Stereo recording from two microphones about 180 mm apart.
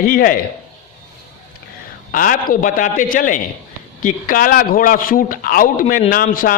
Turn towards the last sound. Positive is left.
turn(degrees=50)  # may be behind; listen again after turning